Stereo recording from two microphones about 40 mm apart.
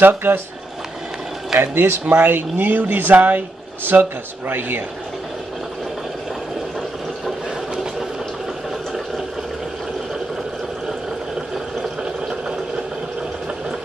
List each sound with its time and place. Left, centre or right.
0.0 s speech: right
1.6 s speech: right
2.5 s speech: right
12.0 s sewing machine: right